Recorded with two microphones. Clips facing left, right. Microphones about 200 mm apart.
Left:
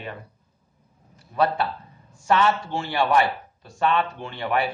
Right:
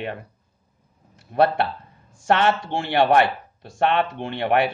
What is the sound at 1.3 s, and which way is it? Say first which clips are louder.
Speech: right 4 dB; 60° right (ahead or behind).